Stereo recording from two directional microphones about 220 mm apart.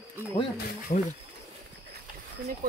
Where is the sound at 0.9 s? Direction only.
35° left (ahead or behind).